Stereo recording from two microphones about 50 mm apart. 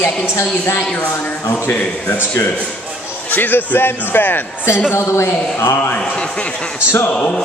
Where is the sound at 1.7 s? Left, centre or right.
Left.